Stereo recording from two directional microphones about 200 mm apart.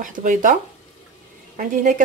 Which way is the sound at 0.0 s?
40° right (ahead or behind).